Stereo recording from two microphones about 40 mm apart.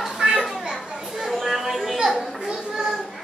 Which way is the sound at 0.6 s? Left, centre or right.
Centre.